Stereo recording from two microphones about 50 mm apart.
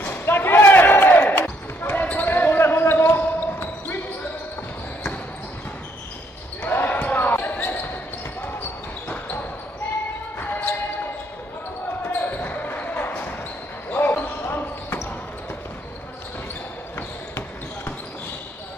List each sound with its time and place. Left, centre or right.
0.2 s basketball bounce: left
6.6 s basketball bounce: left
10.4 s basketball bounce: left
12.1 s basketball bounce: left